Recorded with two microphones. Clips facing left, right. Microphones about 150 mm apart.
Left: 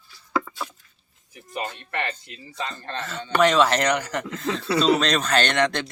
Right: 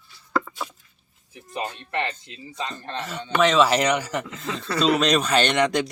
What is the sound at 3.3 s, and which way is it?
Speech, centre (ahead or behind).